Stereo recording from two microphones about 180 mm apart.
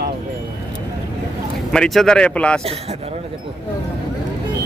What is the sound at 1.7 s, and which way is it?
Speech, centre (ahead or behind).